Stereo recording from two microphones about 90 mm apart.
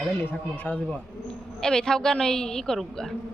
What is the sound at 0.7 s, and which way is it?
Speech, 20° left (ahead or behind).